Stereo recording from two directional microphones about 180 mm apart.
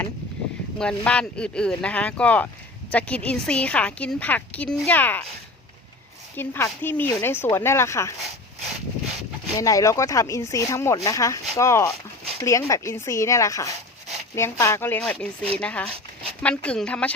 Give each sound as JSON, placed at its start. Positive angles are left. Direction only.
{"t": 0.8, "sound": "speech", "side_deg": 5}
{"t": 6.3, "sound": "speech", "side_deg": 10}
{"t": 9.6, "sound": "speech", "side_deg": 20}